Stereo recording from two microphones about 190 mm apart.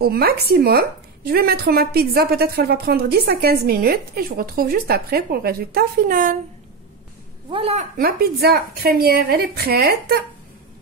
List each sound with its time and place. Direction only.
0.0 s a woman's voice: 55° right (ahead or behind)
7.5 s a woman's voice: 30° right (ahead or behind)
8.0 s a woman's voice: 55° right (ahead or behind)